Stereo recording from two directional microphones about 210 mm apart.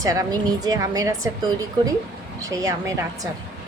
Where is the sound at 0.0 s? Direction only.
15° right (ahead or behind).